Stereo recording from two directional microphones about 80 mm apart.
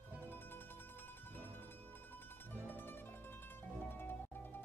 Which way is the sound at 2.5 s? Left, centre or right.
Left.